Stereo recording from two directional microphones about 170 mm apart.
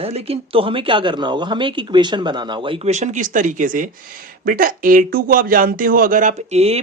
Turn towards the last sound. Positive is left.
turn(degrees=-40)  # may be behind; listen again after turning